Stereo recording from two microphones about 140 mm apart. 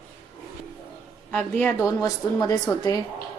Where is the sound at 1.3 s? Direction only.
10° left (ahead or behind).